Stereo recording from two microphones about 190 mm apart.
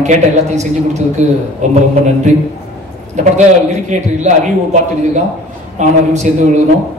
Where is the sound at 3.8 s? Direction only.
40° right (ahead or behind).